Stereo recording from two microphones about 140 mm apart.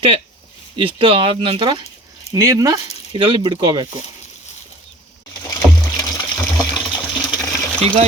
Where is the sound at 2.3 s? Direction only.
25° right (ahead or behind).